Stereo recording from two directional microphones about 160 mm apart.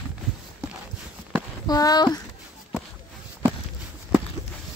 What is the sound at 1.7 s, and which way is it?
Speech, 25° left (ahead or behind).